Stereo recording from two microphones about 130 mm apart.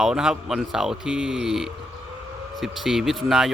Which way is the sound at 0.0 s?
5° right (ahead or behind).